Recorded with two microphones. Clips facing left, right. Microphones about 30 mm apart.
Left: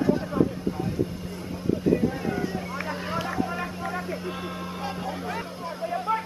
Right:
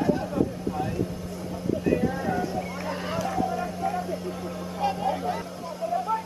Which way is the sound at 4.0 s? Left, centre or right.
Left.